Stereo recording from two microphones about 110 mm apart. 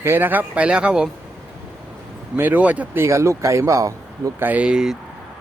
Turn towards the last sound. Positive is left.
turn(degrees=-5)  # may be behind; listen again after turning